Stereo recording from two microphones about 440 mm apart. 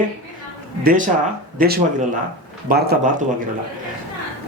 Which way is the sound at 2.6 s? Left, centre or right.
Right.